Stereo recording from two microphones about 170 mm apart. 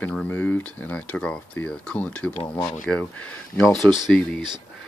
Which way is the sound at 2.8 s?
5° left (ahead or behind).